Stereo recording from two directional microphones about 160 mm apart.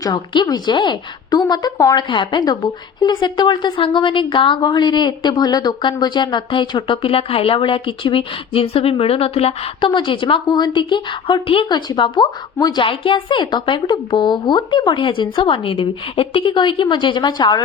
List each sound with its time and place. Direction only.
0.0 s a woman's voice: 25° left (ahead or behind)